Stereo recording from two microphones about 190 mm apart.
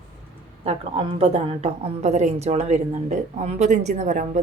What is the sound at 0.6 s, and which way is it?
Speech, 30° right (ahead or behind).